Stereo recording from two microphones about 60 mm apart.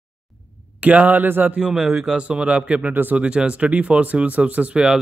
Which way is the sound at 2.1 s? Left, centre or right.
Centre.